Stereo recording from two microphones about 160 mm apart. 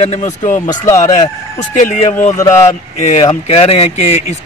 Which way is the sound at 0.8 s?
20° left (ahead or behind).